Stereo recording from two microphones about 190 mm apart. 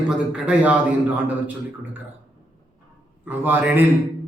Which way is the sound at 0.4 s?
10° right (ahead or behind).